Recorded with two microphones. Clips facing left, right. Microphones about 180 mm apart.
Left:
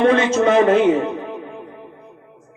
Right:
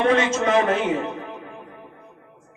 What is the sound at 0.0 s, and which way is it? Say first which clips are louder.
Speech: left 5 dB; 30° left (ahead or behind).